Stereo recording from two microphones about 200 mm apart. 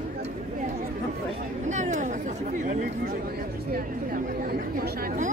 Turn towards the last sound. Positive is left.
turn(degrees=-45)  # may be behind; listen again after turning